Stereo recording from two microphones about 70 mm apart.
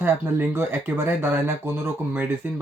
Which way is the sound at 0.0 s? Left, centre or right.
Right.